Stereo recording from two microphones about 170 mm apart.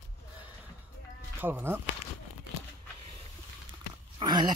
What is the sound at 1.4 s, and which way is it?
Speech, 10° right (ahead or behind).